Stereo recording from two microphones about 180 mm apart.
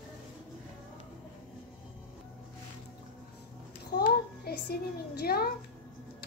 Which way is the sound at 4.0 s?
60° left (ahead or behind).